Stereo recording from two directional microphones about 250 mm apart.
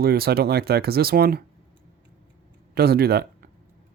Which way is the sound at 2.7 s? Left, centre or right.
Right.